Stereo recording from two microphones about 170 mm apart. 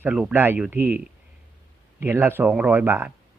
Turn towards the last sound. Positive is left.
turn(degrees=-10)  # may be behind; listen again after turning